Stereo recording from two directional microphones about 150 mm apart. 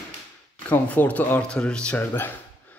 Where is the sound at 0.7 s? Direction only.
10° left (ahead or behind).